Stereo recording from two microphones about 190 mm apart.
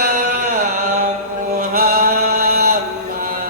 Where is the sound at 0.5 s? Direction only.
40° right (ahead or behind).